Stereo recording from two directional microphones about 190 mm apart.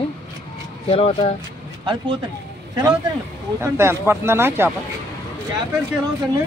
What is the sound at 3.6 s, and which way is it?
Speech, 15° right (ahead or behind).